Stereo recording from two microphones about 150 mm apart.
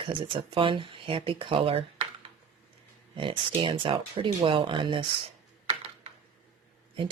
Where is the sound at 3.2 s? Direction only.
35° right (ahead or behind).